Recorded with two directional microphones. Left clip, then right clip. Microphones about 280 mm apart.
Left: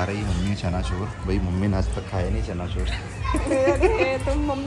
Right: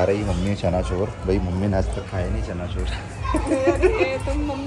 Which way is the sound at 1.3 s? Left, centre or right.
Centre.